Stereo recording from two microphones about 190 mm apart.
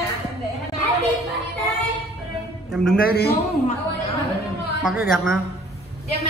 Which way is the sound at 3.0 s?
55° left (ahead or behind).